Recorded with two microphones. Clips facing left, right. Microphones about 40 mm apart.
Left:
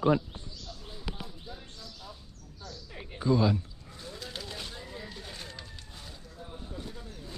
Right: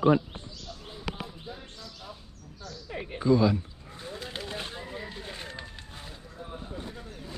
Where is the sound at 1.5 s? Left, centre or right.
Right.